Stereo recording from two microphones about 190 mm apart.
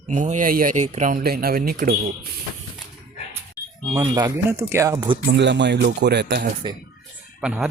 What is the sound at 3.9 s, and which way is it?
Speech, 15° right (ahead or behind).